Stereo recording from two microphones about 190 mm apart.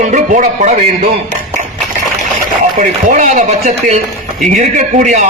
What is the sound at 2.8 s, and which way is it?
A man's voice, 45° right (ahead or behind).